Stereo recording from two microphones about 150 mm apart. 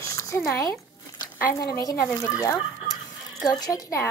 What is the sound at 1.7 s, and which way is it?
Speech, 20° left (ahead or behind).